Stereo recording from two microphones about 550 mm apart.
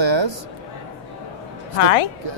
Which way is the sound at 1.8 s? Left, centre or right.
Left.